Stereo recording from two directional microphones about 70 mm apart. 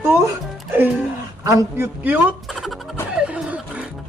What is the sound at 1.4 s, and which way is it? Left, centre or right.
Speech, right.